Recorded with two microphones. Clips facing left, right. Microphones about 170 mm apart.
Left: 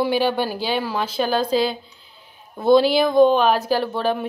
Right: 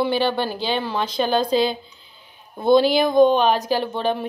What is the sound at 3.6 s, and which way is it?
Speech, 20° right (ahead or behind).